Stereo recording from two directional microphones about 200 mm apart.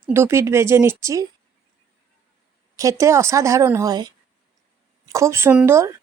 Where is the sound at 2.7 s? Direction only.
15° right (ahead or behind).